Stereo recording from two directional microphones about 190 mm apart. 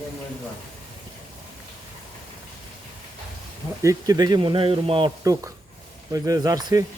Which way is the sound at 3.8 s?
20° right (ahead or behind).